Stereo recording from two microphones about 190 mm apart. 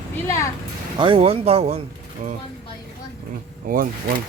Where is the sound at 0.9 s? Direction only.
25° right (ahead or behind).